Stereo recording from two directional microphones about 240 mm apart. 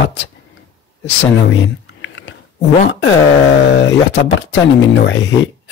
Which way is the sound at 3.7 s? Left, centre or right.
Left.